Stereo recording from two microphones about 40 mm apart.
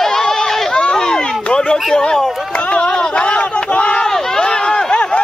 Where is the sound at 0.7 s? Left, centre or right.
Centre.